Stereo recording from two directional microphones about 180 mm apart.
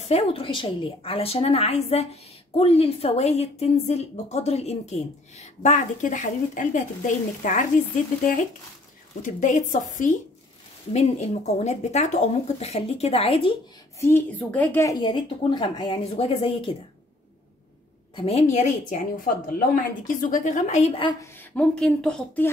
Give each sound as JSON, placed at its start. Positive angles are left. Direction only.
{"t": 0.0, "sound": "a woman's voice", "side_deg": 35}
{"t": 9.2, "sound": "a woman's voice", "side_deg": 45}
{"t": 13.9, "sound": "a woman's voice", "side_deg": 15}
{"t": 18.1, "sound": "a woman's voice", "side_deg": 35}
{"t": 21.2, "sound": "speech", "side_deg": 5}